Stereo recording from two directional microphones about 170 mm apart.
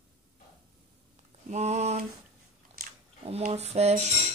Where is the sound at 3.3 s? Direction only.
40° right (ahead or behind).